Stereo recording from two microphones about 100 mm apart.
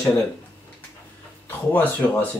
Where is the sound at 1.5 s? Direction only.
20° left (ahead or behind).